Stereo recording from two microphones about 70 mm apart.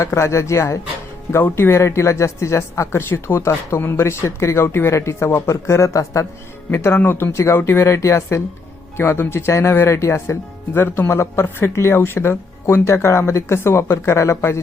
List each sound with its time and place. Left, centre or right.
0.0 s speech: left
6.7 s speech: left